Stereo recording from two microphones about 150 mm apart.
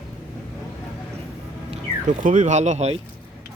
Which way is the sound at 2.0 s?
60° right (ahead or behind).